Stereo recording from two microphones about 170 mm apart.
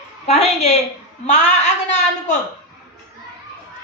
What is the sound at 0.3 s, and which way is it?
Speech, 40° left (ahead or behind).